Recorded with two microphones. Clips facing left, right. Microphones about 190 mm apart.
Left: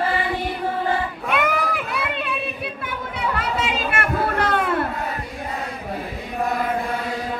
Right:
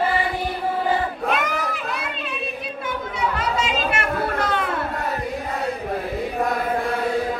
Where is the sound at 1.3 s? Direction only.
60° left (ahead or behind).